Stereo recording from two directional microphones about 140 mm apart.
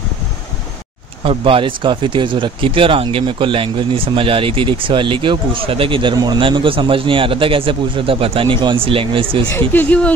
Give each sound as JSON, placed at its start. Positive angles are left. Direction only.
{"t": 1.2, "sound": "speech", "side_deg": -40}
{"t": 9.5, "sound": "speech", "side_deg": 15}